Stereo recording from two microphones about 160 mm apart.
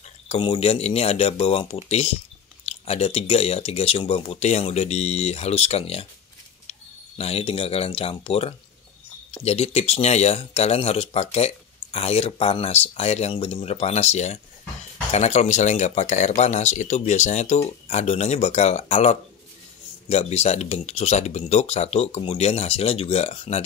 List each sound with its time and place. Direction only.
0.3 s speech: 35° left (ahead or behind)